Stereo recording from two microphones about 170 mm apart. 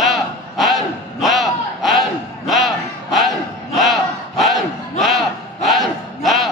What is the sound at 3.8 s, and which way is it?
Battle cry, centre (ahead or behind).